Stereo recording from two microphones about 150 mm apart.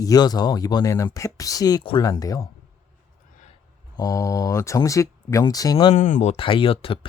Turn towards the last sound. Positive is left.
turn(degrees=35)  # may be behind; listen again after turning